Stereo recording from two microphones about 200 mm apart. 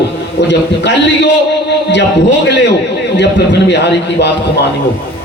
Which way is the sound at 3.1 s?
60° left (ahead or behind).